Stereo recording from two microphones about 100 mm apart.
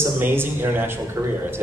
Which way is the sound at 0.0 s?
20° right (ahead or behind).